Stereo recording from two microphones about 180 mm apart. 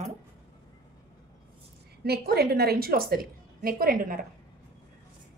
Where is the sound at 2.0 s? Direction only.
60° right (ahead or behind).